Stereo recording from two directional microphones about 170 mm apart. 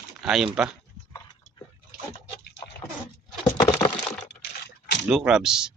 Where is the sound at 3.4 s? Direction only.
20° left (ahead or behind).